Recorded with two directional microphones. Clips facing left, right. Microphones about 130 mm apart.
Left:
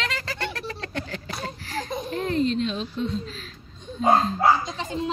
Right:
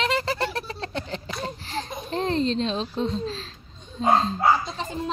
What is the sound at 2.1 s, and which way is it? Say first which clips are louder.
A child's voice: right 1 dB; 30° right (ahead or behind).